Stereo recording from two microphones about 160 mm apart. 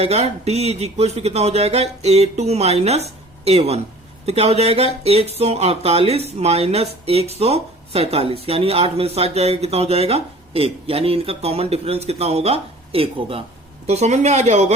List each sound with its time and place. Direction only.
0.0 s speech: 40° right (ahead or behind)